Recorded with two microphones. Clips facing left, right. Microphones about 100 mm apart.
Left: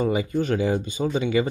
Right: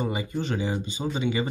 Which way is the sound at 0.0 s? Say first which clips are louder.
Left 6 dB; 55° left (ahead or behind).